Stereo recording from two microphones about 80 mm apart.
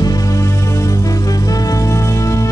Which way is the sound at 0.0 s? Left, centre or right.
Left.